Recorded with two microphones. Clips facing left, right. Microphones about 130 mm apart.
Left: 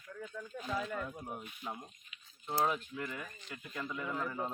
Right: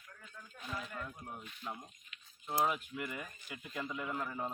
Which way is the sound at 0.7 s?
90° left.